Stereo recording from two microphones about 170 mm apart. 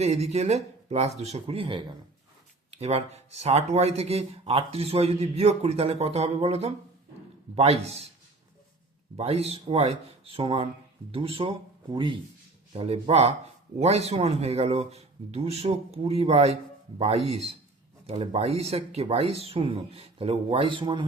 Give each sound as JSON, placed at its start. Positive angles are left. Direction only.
{"t": 0.0, "sound": "speech", "side_deg": -40}
{"t": 9.1, "sound": "speech", "side_deg": -35}